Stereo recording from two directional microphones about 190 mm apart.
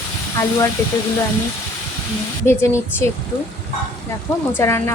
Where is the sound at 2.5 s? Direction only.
15° left (ahead or behind).